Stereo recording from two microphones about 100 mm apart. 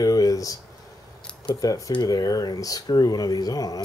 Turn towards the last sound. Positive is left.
turn(degrees=40)  # may be behind; listen again after turning